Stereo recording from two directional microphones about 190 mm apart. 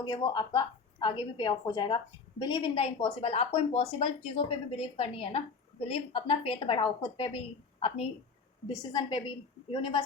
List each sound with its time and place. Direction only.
0.0 s speech: 20° left (ahead or behind)